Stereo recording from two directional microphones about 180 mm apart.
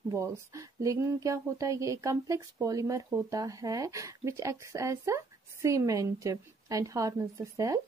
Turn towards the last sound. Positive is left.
turn(degrees=-20)  # may be behind; listen again after turning